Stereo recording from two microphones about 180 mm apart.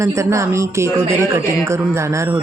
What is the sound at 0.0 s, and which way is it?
Speech, 15° right (ahead or behind).